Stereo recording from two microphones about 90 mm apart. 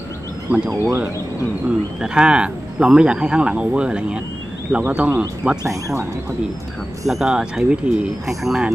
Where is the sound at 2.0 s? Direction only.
10° right (ahead or behind).